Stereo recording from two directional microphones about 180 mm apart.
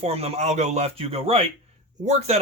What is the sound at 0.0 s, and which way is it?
Speech, 35° right (ahead or behind).